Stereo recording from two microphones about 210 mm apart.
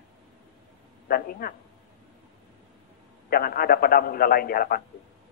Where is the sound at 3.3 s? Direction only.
45° left (ahead or behind).